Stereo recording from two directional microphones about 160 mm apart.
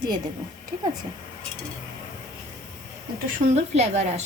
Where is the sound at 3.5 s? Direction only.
45° right (ahead or behind).